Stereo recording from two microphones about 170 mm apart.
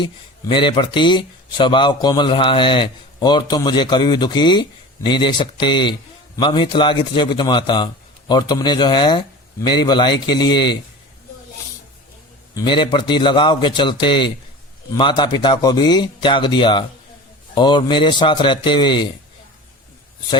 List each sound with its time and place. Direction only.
0.0 s speech: 30° left (ahead or behind)
12.5 s speech: 30° left (ahead or behind)